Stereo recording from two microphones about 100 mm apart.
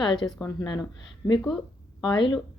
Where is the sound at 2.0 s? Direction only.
50° left (ahead or behind).